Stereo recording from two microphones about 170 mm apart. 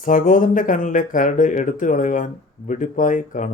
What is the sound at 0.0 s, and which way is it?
Speech, 50° left (ahead or behind).